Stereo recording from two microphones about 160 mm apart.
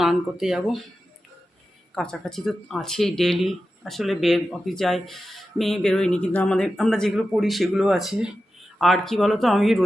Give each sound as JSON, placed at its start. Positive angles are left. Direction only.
{"t": 0.0, "sound": "speech", "side_deg": 0}
{"t": 2.0, "sound": "speech", "side_deg": 5}